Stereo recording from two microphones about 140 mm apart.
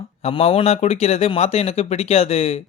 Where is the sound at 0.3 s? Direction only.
45° left (ahead or behind).